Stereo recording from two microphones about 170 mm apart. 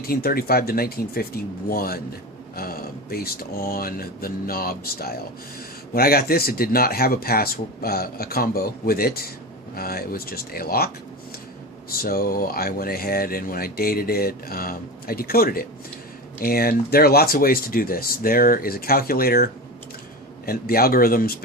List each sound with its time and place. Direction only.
0.0 s speech: 60° left (ahead or behind)
11.9 s speech: 60° left (ahead or behind)